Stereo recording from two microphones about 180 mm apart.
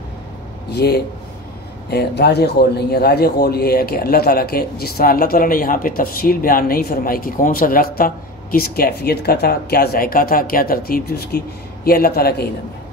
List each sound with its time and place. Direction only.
0.7 s a man's voice: 65° left (ahead or behind)